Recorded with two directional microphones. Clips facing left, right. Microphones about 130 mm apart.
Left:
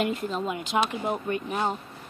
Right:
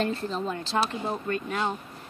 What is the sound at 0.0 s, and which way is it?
A woman's voice, 10° left (ahead or behind).